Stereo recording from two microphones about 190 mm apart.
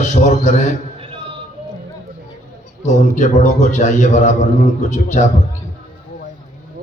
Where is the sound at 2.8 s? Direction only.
40° left (ahead or behind).